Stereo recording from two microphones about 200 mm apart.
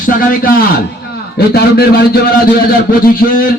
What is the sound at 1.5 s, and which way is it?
Speech, 55° left (ahead or behind).